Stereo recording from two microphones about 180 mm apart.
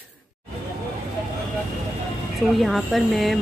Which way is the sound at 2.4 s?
Centre (ahead or behind).